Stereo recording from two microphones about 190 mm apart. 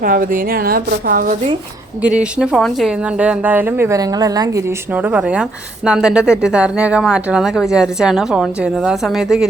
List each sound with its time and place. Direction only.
0.0 s speech: 45° right (ahead or behind)
2.0 s speech: 5° right (ahead or behind)
5.0 s a woman's voice: 5° right (ahead or behind)